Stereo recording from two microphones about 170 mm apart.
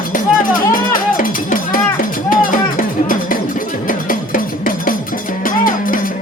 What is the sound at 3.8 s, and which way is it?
Music, 55° left (ahead or behind).